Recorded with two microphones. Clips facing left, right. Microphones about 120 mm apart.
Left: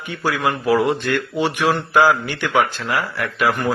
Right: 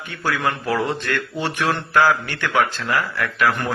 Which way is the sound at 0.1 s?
15° left (ahead or behind).